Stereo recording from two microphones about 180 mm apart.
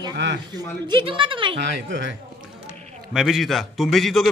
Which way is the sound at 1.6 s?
80° right.